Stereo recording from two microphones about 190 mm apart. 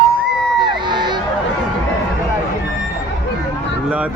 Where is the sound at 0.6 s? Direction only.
25° right (ahead or behind).